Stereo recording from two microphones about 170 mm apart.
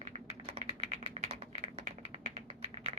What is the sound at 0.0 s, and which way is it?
Typing, 40° right (ahead or behind).